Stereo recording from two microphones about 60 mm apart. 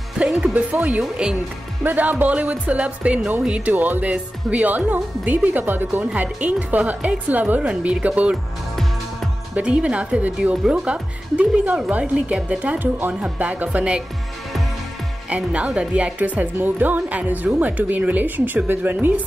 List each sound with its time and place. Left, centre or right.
0.2 s speech: centre
1.0 s speech: centre
1.8 s speech: right
3.7 s speech: right
9.6 s speech: centre
15.2 s speech: right